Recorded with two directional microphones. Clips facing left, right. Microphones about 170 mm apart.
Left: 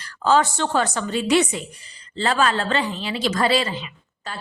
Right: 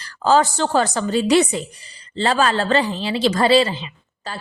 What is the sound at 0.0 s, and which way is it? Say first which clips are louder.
A woman's voice: right 2 dB; 35° right (ahead or behind).